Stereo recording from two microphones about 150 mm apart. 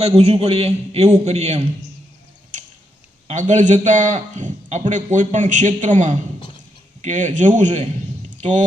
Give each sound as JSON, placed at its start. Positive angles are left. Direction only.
{"t": 0.0, "sound": "a man's voice", "side_deg": -45}
{"t": 3.2, "sound": "a man's voice", "side_deg": -55}